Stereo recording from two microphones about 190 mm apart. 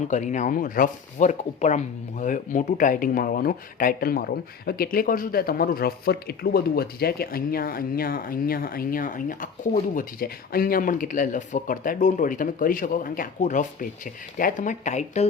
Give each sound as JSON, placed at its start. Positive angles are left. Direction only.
{"t": 0.1, "sound": "speech", "side_deg": 40}